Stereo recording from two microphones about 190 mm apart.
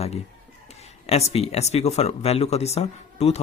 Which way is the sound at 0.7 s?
35° left (ahead or behind).